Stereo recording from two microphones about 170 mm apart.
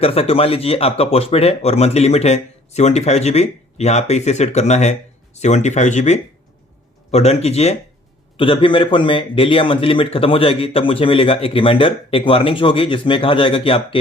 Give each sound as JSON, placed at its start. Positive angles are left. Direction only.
{"t": 0.0, "sound": "speech", "side_deg": 35}